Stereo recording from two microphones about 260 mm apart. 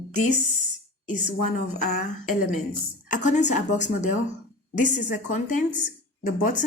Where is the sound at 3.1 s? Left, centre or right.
Left.